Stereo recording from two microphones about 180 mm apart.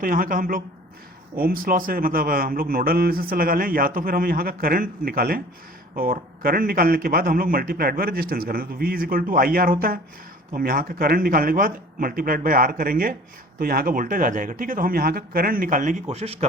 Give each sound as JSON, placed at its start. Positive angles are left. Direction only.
{"t": 0.0, "sound": "a man's voice", "side_deg": -50}
{"t": 16.0, "sound": "speech", "side_deg": -35}